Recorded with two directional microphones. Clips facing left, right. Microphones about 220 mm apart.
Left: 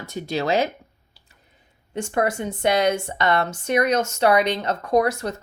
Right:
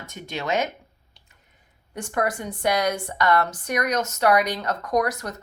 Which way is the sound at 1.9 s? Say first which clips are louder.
Left 3 dB; 25° left (ahead or behind).